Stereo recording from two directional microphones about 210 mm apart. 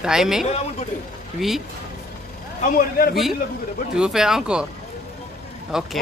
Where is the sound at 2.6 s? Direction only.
40° left (ahead or behind).